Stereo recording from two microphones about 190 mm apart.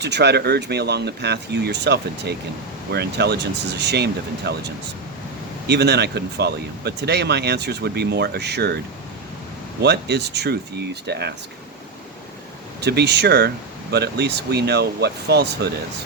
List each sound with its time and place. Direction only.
0.0 s speech: 65° right (ahead or behind)
9.8 s speech: 60° right (ahead or behind)
12.8 s speech: 60° right (ahead or behind)